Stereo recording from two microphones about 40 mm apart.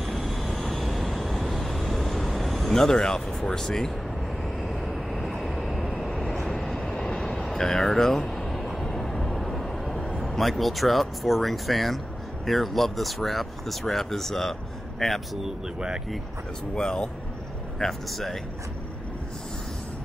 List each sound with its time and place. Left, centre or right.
0.0 s vehicle: centre
2.7 s speech: centre
4.6 s vehicle: centre
7.3 s speech: centre
8.4 s a sound: centre
8.6 s vehicle: centre
10.1 s speech: centre
15.4 s speech: centre
16.7 s speech: centre
17.7 s speech: centre